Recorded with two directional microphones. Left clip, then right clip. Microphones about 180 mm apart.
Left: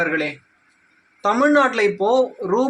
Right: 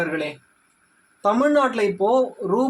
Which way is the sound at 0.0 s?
5° left (ahead or behind).